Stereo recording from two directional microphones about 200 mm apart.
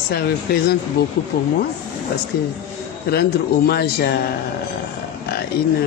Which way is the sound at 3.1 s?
50° left (ahead or behind).